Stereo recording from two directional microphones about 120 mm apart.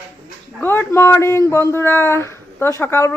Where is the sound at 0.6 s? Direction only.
15° left (ahead or behind).